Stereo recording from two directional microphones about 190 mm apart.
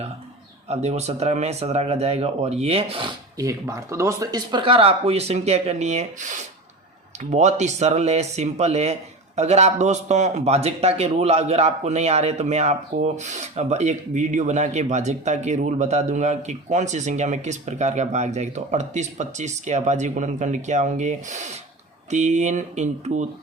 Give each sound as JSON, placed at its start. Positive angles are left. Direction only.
{"t": 0.7, "sound": "speech", "side_deg": -35}